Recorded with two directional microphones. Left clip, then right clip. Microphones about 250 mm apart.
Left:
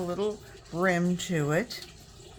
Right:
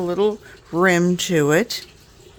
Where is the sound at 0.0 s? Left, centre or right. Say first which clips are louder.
Right 11 dB; right.